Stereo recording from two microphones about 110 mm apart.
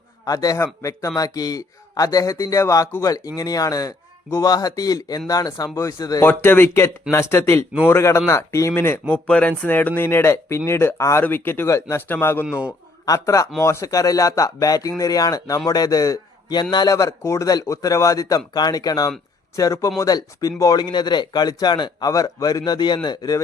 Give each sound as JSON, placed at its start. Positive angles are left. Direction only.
{"t": 0.3, "sound": "speech", "side_deg": 35}
{"t": 6.2, "sound": "speech", "side_deg": 20}
{"t": 12.5, "sound": "a man's voice", "side_deg": -10}
{"t": 13.1, "sound": "speech", "side_deg": 30}
{"t": 20.8, "sound": "speech", "side_deg": 40}